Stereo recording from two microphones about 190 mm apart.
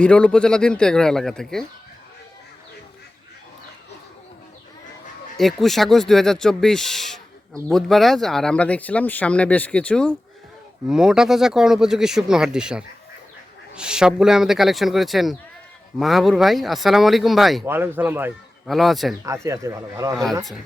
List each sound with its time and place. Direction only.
0.0 s speech: 5° left (ahead or behind)
5.4 s speech: centre (ahead or behind)
17.7 s a man's voice: 10° right (ahead or behind)
19.2 s speech: 15° right (ahead or behind)